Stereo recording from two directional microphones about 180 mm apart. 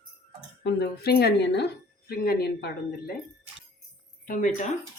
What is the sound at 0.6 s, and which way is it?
A woman's voice, 65° left (ahead or behind).